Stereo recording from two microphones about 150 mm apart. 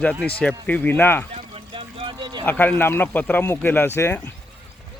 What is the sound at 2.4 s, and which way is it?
Speech, 10° left (ahead or behind).